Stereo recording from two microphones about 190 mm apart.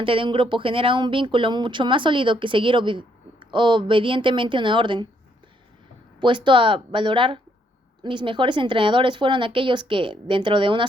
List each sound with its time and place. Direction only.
0.0 s speech: 25° right (ahead or behind)
6.1 s speech: 25° right (ahead or behind)